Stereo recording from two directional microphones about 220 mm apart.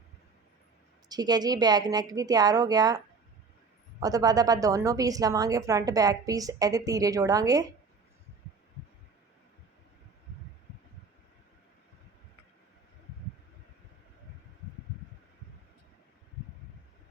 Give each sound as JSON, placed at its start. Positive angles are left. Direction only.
{"t": 1.0, "sound": "a woman's voice", "side_deg": -20}
{"t": 4.0, "sound": "a woman's voice", "side_deg": -15}